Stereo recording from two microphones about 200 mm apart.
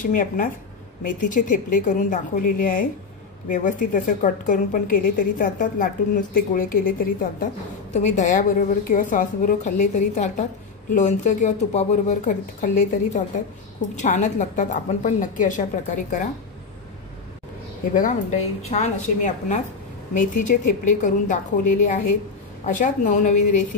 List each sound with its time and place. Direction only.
0.0 s a woman's voice: 45° left (ahead or behind)
17.9 s a woman's voice: 40° left (ahead or behind)